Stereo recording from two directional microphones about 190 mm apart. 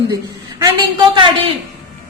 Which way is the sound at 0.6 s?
25° right (ahead or behind).